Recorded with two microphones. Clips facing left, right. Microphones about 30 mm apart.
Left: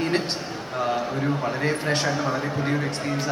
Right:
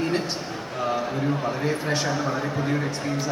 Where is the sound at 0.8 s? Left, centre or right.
Left.